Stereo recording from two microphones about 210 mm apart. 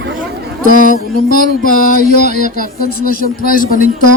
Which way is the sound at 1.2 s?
45° left (ahead or behind).